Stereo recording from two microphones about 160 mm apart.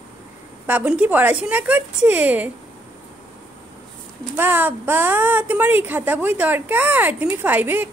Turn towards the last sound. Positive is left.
turn(degrees=-10)  # may be behind; listen again after turning